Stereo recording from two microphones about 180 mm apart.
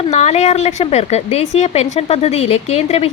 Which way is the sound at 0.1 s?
40° left (ahead or behind).